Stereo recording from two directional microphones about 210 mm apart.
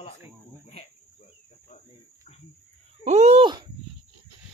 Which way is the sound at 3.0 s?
35° right (ahead or behind).